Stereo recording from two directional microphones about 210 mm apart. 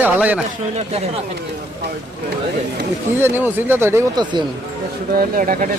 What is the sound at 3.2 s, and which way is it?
Speech, 10° right (ahead or behind).